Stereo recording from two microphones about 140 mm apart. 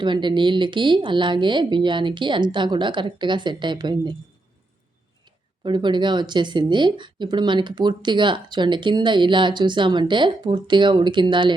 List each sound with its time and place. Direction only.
0.0 s speech: 35° right (ahead or behind)
5.2 s speech: 35° right (ahead or behind)